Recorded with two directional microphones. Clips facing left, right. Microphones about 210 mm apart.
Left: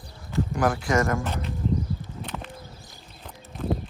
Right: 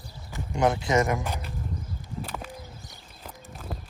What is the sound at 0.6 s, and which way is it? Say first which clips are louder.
Speech: right 1 dB; 20° right (ahead or behind).